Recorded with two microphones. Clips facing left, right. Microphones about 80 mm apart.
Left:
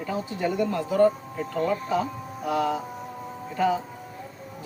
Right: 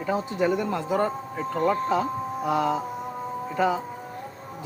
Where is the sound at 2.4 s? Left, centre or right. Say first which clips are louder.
Right 1 dB; right.